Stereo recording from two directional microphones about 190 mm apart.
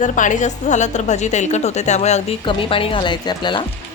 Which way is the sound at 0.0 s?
40° left (ahead or behind).